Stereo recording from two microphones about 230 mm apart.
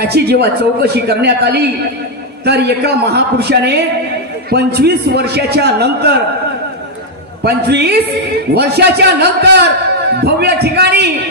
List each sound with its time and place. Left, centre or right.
0.0 s a man's voice: right
7.4 s a man's voice: right